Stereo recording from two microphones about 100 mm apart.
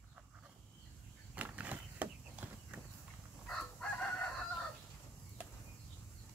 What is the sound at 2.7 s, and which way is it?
Walk, 15° right (ahead or behind).